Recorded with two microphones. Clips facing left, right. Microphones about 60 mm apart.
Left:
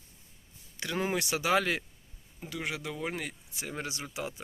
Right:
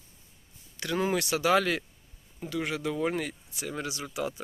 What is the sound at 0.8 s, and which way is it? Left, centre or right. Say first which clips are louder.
Speech: right 3 dB; left.